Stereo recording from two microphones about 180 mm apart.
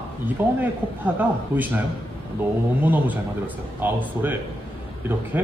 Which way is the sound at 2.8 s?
10° right (ahead or behind).